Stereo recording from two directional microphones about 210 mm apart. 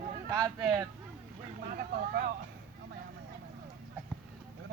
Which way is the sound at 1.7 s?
40° right (ahead or behind).